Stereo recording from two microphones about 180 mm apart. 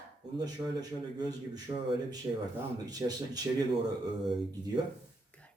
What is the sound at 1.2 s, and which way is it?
Speech, 20° right (ahead or behind).